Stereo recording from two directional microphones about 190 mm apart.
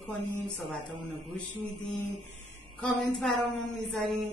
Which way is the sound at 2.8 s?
Centre (ahead or behind).